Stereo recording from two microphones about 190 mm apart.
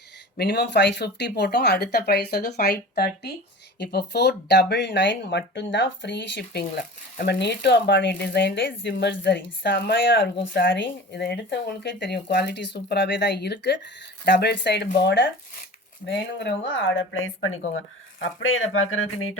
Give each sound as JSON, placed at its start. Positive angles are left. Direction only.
{"t": 0.3, "sound": "speech", "side_deg": 60}